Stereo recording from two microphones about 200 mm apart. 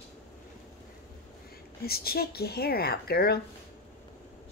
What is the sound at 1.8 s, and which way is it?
Speech, 50° left (ahead or behind).